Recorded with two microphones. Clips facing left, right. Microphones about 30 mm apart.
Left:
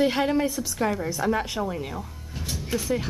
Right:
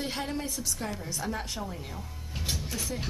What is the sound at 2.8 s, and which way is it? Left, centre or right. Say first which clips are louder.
Speech: left 8 dB; centre.